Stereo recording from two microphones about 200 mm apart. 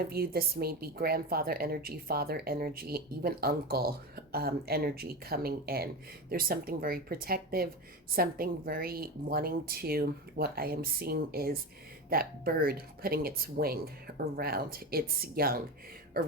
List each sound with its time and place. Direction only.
0.0 s a woman's voice: 50° right (ahead or behind)